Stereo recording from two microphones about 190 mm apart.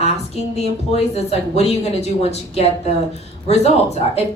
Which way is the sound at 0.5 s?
35° left (ahead or behind).